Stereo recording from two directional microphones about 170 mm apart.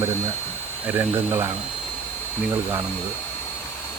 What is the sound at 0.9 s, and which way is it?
Speech, 10° right (ahead or behind).